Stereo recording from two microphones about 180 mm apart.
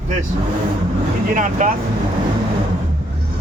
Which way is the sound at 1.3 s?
45° right (ahead or behind).